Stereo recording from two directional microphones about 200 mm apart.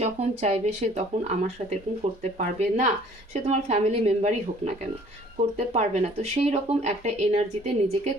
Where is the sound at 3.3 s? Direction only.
30° right (ahead or behind).